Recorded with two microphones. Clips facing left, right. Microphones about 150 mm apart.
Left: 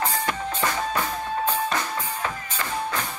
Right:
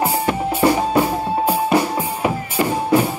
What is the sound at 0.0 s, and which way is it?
Music, 10° right (ahead or behind).